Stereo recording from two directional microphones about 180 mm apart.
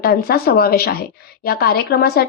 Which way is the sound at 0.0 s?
55° left (ahead or behind).